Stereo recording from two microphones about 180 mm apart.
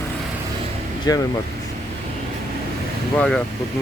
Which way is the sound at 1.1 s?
20° left (ahead or behind).